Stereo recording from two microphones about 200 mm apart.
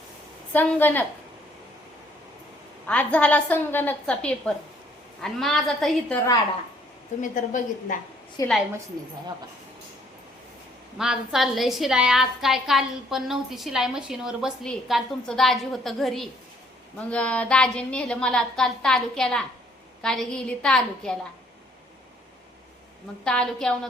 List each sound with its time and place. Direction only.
0.5 s a woman's voice: 10° left (ahead or behind)
2.8 s a woman's voice: 5° left (ahead or behind)
7.2 s a woman's voice: 40° left (ahead or behind)
8.4 s a woman's voice: 15° left (ahead or behind)
10.9 s a woman's voice: 5° right (ahead or behind)
23.2 s a woman's voice: 5° left (ahead or behind)